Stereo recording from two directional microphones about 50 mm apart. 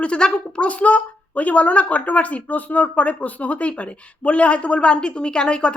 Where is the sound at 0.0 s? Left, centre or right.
Centre.